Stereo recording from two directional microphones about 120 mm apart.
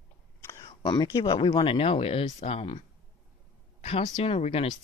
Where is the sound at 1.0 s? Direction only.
35° left (ahead or behind); by 2.8 s 50° left (ahead or behind).